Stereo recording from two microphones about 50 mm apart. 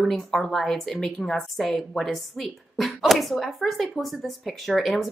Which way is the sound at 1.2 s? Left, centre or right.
Centre.